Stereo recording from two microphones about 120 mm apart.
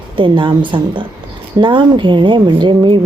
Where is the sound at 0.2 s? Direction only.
40° right (ahead or behind).